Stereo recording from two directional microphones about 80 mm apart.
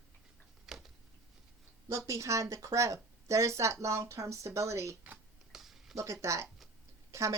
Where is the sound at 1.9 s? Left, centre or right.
Right.